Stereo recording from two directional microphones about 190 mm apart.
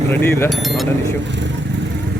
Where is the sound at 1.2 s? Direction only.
70° right (ahead or behind).